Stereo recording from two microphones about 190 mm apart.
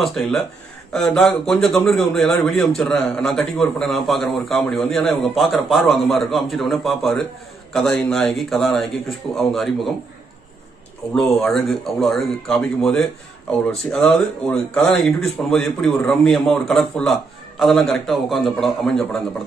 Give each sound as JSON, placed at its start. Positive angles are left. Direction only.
{"t": 0.0, "sound": "speech", "side_deg": 0}
{"t": 11.1, "sound": "speech", "side_deg": 0}